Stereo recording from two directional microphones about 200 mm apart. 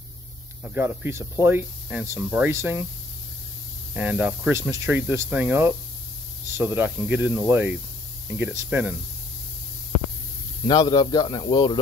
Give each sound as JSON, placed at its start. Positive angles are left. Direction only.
{"t": 0.7, "sound": "speech", "side_deg": -10}
{"t": 3.9, "sound": "speech", "side_deg": -5}
{"t": 10.7, "sound": "speech", "side_deg": 20}